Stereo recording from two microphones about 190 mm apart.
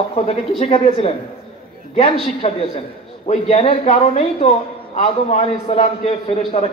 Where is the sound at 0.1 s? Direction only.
30° left (ahead or behind).